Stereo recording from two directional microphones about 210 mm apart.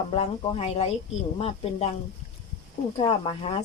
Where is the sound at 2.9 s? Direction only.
25° left (ahead or behind).